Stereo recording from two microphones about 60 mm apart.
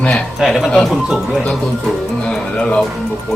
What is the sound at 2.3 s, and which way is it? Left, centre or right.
Speech, centre.